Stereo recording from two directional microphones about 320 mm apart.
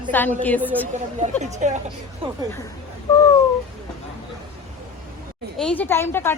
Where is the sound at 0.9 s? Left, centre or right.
Right.